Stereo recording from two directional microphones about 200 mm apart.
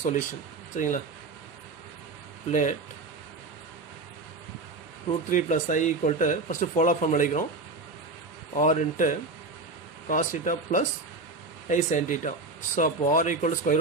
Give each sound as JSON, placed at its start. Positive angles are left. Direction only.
{"t": 0.0, "sound": "speech", "side_deg": 40}
{"t": 2.5, "sound": "speech", "side_deg": 40}
{"t": 5.3, "sound": "speech", "side_deg": 40}
{"t": 8.5, "sound": "speech", "side_deg": 40}